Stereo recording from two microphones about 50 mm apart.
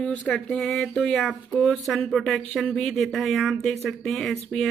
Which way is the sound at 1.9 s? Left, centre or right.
Centre.